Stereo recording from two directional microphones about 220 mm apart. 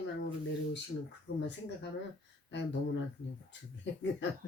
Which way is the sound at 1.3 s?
50° left (ahead or behind).